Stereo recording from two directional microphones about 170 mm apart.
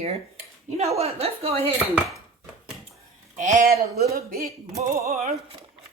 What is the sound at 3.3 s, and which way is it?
Speech, 55° right (ahead or behind).